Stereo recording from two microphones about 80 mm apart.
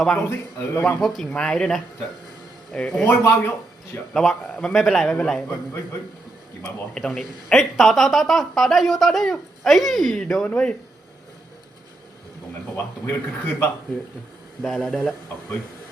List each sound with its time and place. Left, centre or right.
0.0 s a man's voice: centre
0.3 s a man's voice: left
0.9 s a man's voice: centre
3.1 s a man's voice: left
4.1 s a man's voice: centre
6.9 s speech: centre
12.7 s a man's voice: left
14.6 s speech: centre